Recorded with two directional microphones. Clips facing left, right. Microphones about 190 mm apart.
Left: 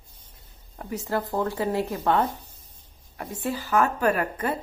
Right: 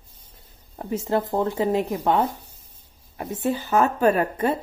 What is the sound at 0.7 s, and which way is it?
Speech, 25° right (ahead or behind).